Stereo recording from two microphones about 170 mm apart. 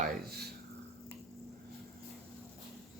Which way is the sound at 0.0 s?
65° right (ahead or behind).